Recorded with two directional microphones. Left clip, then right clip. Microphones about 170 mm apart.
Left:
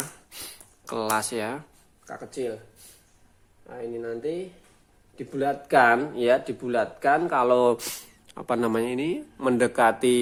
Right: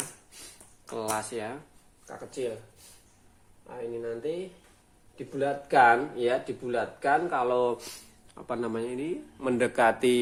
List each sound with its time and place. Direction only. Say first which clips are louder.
0.9 s speech: left 6 dB; 40° left (ahead or behind)
2.0 s speech: left 2 dB; 55° left (ahead or behind)
3.7 s speech: left 2 dB; 50° left (ahead or behind)
9.4 s speech: left 3 dB; 25° left (ahead or behind)